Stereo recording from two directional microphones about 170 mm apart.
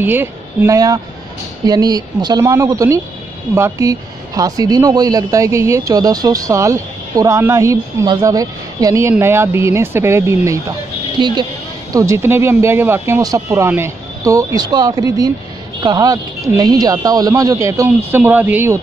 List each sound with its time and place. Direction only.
0.0 s speech: 10° right (ahead or behind)